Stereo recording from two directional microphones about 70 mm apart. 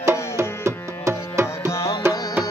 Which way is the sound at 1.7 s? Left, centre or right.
Left.